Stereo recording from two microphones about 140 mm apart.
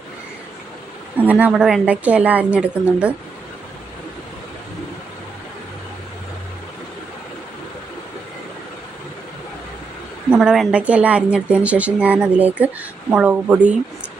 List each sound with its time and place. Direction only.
1.2 s speech: 10° right (ahead or behind)
10.2 s speech: 5° right (ahead or behind)